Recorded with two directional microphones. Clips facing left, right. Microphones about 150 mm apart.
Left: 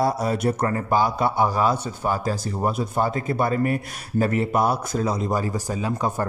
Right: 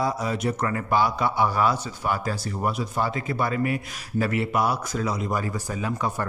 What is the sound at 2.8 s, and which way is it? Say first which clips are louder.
Speech: left 3 dB; 45° left (ahead or behind).